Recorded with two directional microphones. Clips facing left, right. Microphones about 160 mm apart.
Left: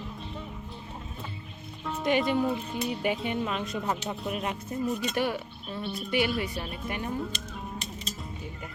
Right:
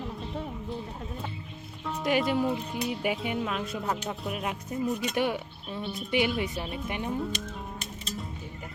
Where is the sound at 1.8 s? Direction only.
5° right (ahead or behind).